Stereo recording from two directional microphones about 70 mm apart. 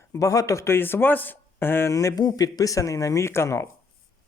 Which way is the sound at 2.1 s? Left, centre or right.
Left.